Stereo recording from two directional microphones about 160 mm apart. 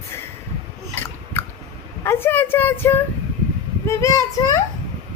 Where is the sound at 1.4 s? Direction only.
15° left (ahead or behind).